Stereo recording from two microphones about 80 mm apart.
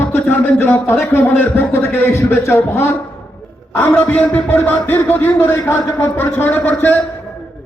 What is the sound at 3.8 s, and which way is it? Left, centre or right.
A man's voice, left.